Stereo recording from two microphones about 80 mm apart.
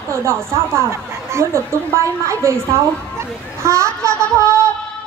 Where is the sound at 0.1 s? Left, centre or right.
Right.